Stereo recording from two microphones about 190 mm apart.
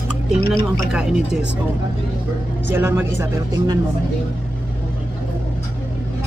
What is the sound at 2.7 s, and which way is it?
Speech, 10° right (ahead or behind).